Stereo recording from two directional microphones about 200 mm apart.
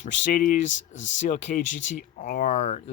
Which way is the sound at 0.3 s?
40° left (ahead or behind).